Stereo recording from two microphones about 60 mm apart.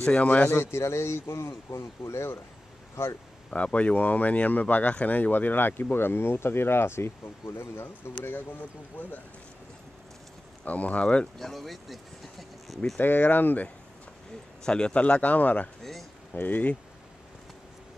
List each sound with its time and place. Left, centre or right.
0.0 s speech: centre
0.5 s speech: left
3.4 s speech: centre; by 8.1 s left
8.3 s speech: left
10.6 s speech: left
11.3 s speech: centre
12.9 s speech: left
14.6 s speech: centre
15.8 s speech: centre
16.3 s speech: left